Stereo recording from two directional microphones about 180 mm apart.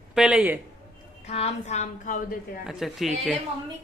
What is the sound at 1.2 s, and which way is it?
A woman's voice, 35° left (ahead or behind).